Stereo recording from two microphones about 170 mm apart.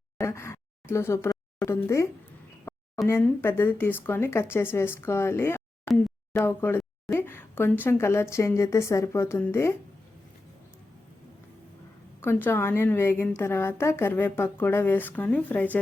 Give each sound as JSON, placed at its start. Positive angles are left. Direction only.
{"t": 0.2, "sound": "a sound", "side_deg": 15}
{"t": 3.1, "sound": "a woman's voice", "side_deg": 15}
{"t": 12.2, "sound": "a woman's voice", "side_deg": 10}